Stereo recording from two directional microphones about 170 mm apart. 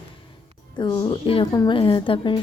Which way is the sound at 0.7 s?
20° left (ahead or behind).